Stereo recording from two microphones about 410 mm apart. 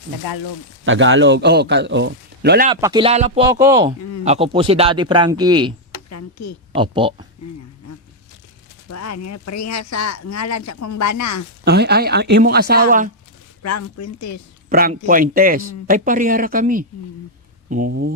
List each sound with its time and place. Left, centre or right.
0.2 s speech: left
0.9 s a man's voice: right
2.6 s speech: centre
6.1 s speech: left
6.7 s speech: centre
8.9 s speech: left
11.6 s a man's voice: right
13.6 s speech: left
14.7 s a man's voice: right